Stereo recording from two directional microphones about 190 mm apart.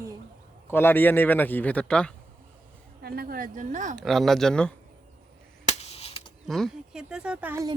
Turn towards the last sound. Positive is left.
turn(degrees=-15)  # may be behind; listen again after turning